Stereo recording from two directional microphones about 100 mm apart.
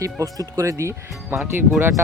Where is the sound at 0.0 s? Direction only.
35° right (ahead or behind).